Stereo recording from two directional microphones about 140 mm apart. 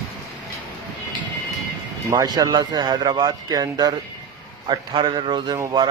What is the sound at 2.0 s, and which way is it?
A man's voice, 30° right (ahead or behind).